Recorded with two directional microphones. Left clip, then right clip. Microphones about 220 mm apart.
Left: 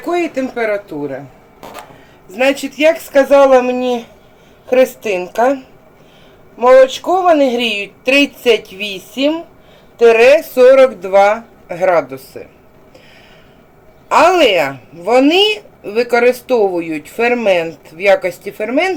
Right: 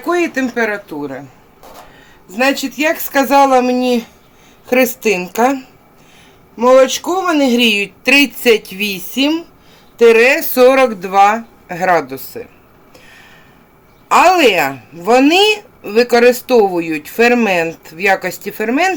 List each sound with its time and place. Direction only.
0.0 s speech: 35° right (ahead or behind)
2.3 s speech: 35° right (ahead or behind); by 5.5 s 50° right (ahead or behind)
6.6 s speech: 50° right (ahead or behind)
14.1 s speech: 40° right (ahead or behind)